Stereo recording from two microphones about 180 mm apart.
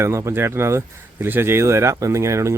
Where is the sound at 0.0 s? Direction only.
15° right (ahead or behind).